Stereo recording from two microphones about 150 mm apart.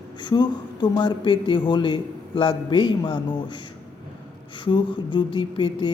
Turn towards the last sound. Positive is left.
turn(degrees=35)  # may be behind; listen again after turning